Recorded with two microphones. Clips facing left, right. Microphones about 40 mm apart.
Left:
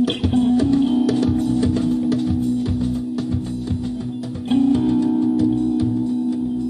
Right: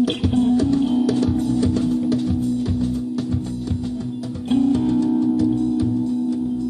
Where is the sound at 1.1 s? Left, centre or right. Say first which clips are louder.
Left 1 dB; centre.